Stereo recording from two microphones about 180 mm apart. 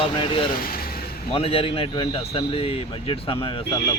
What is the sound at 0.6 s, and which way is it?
Vehicle, 55° left (ahead or behind).